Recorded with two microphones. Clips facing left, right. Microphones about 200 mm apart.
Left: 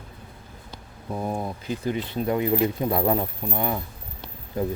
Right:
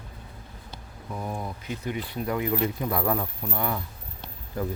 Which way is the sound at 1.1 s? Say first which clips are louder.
Left 5 dB; 30° left (ahead or behind).